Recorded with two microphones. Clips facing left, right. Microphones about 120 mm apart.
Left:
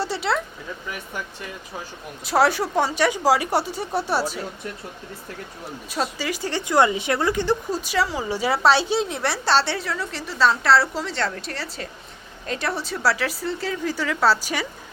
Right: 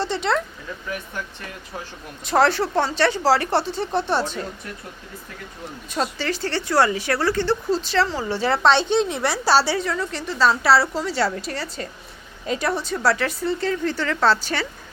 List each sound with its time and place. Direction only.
0.0 s speech: 5° left (ahead or behind)
2.2 s speech: 10° left (ahead or behind)
5.9 s speech: 5° left (ahead or behind)